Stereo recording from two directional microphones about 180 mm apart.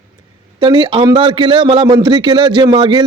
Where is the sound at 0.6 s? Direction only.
25° right (ahead or behind).